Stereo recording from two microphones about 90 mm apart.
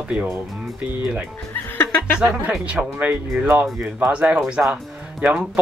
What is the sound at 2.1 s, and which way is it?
Speech, 10° right (ahead or behind).